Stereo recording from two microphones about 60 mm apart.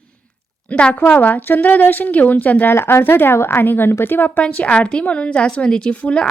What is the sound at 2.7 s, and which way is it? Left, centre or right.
A woman's voice, left.